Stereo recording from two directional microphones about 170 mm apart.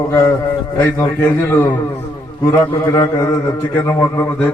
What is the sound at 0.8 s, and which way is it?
A man's voice, 15° left (ahead or behind).